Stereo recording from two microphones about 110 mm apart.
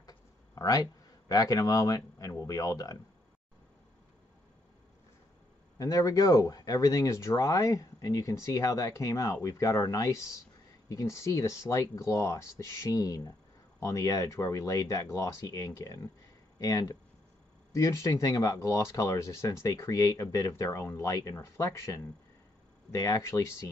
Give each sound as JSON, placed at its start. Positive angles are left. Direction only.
{"t": 0.6, "sound": "speech", "side_deg": 35}
{"t": 5.8, "sound": "speech", "side_deg": 30}